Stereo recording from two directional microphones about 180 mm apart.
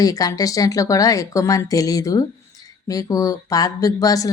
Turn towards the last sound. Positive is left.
turn(degrees=20)  # may be behind; listen again after turning